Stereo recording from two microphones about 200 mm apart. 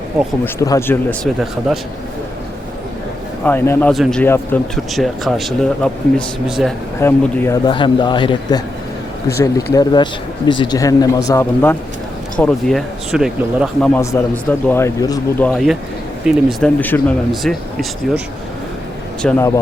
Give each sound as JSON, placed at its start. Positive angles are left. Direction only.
{"t": 0.4, "sound": "speech", "side_deg": 15}
{"t": 3.4, "sound": "speech", "side_deg": 10}
{"t": 7.0, "sound": "a man's voice", "side_deg": 15}
{"t": 9.7, "sound": "a man's voice", "side_deg": 20}
{"t": 13.9, "sound": "speech", "side_deg": 15}
{"t": 15.4, "sound": "speech", "side_deg": 0}
{"t": 19.2, "sound": "speech", "side_deg": 15}